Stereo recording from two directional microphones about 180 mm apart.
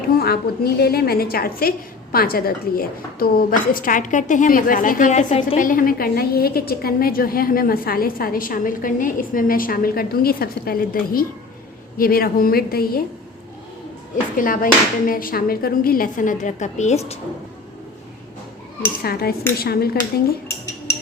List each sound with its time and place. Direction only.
0.2 s a woman's voice: 60° left (ahead or behind)
14.3 s a woman's voice: 50° left (ahead or behind)
19.0 s a woman's voice: 60° left (ahead or behind)